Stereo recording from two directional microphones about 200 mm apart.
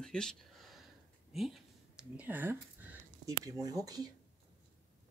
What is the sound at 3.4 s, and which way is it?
Speech, 15° right (ahead or behind).